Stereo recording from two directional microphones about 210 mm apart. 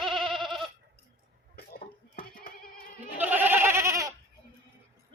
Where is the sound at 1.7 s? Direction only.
45° left (ahead or behind).